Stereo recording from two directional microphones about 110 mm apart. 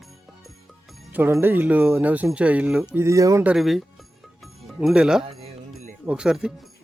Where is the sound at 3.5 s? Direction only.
Centre (ahead or behind).